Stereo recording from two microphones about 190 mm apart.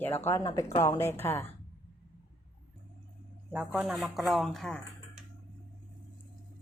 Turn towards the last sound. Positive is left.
turn(degrees=5)  # may be behind; listen again after turning